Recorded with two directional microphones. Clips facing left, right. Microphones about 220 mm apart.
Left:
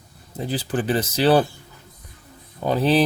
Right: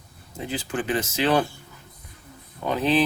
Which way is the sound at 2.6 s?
35° left (ahead or behind).